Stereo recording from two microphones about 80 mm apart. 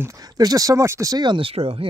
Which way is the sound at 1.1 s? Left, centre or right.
Right.